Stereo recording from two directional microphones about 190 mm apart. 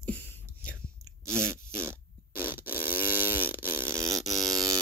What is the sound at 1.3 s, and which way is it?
Fart, 15° right (ahead or behind).